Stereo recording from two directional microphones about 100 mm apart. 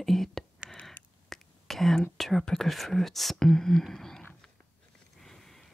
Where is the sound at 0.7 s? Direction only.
5° left (ahead or behind).